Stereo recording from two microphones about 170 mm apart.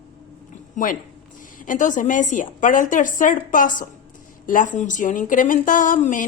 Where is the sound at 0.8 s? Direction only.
45° left (ahead or behind).